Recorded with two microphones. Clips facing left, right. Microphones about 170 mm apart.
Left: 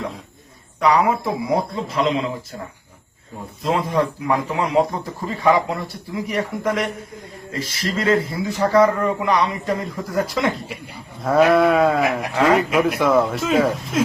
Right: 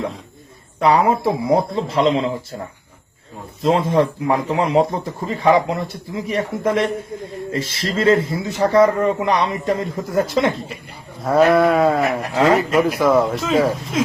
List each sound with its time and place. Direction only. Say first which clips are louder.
0.8 s speech: right 2 dB; 30° right (ahead or behind)
3.6 s speech: right 4 dB; 25° right (ahead or behind)
11.2 s speech: right 1 dB; centre (ahead or behind)